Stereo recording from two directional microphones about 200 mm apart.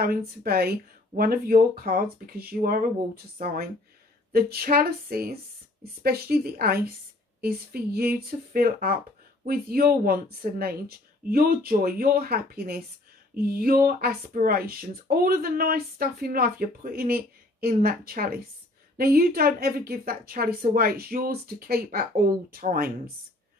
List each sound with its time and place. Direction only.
0.0 s speech: 50° right (ahead or behind)